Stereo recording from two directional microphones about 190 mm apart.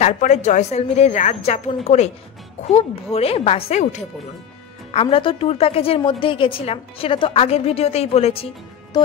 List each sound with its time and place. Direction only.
0.0 s a woman's voice: 40° left (ahead or behind)